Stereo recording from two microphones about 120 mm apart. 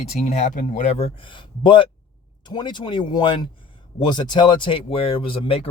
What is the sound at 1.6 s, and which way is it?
Speech, 45° left (ahead or behind).